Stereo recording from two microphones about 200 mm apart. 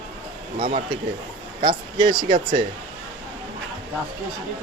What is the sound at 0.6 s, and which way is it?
Speech, 40° right (ahead or behind).